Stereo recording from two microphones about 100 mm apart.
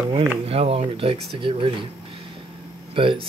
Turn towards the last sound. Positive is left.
turn(degrees=-60)  # may be behind; listen again after turning